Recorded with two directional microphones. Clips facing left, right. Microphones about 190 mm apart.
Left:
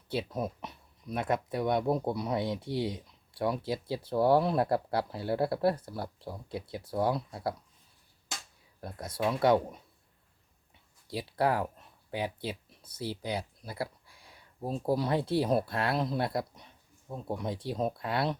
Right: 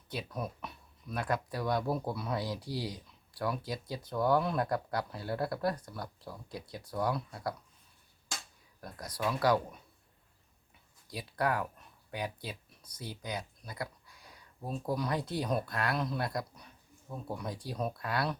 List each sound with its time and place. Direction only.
0.1 s speech: 25° left (ahead or behind)
8.8 s speech: 25° left (ahead or behind)
11.1 s speech: 30° left (ahead or behind)